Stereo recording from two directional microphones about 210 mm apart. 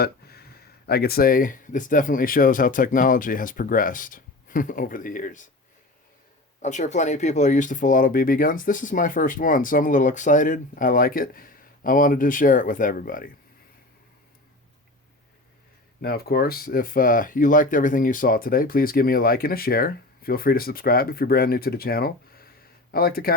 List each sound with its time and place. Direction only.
0.0 s speech: 45° left (ahead or behind)
6.6 s speech: 35° left (ahead or behind)
16.0 s speech: 45° left (ahead or behind)